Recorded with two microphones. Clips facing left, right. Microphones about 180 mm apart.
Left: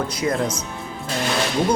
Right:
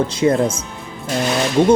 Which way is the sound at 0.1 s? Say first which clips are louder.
Right 6 dB; 30° right (ahead or behind).